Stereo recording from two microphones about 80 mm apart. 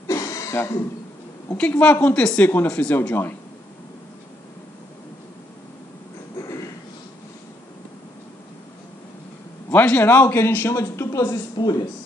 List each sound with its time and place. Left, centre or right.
0.0 s throat clearing: left
1.6 s a woman's voice: centre
9.7 s a man's voice: left
11.5 s speech: left